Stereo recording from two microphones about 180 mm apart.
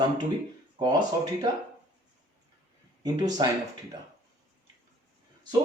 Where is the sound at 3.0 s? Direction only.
20° right (ahead or behind).